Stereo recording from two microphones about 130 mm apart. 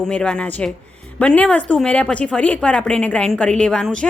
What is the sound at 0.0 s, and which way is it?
A woman's voice, 5° left (ahead or behind).